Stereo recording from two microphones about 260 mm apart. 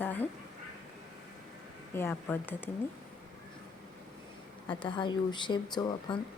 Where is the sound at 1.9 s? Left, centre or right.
Centre.